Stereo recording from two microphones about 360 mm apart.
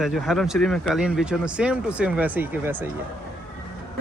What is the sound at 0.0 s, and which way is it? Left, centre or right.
Speech, centre.